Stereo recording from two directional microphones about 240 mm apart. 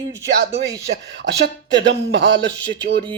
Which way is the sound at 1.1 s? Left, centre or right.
Right.